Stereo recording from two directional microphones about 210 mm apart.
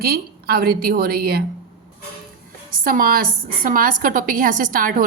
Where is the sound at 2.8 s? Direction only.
40° right (ahead or behind).